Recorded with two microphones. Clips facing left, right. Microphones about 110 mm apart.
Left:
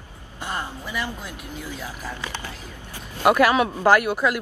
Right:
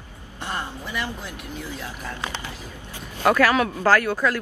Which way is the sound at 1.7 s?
5° left (ahead or behind).